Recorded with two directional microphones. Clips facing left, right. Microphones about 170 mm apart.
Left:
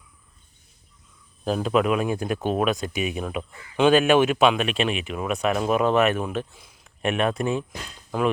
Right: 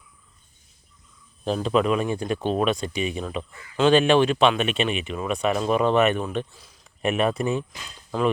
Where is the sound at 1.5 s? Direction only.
5° left (ahead or behind).